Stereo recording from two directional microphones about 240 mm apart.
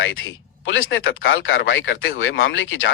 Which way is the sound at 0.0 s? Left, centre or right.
Left.